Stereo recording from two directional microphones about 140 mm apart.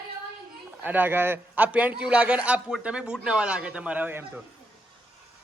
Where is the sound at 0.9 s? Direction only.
15° right (ahead or behind).